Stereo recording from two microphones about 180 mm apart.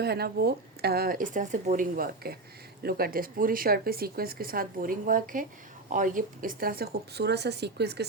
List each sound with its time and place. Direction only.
0.0 s speech: 60° right (ahead or behind)